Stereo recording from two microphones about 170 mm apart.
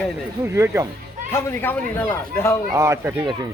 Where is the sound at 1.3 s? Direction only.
15° left (ahead or behind).